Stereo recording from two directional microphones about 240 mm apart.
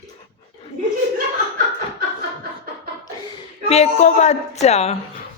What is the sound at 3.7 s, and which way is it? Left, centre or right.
Speech, left.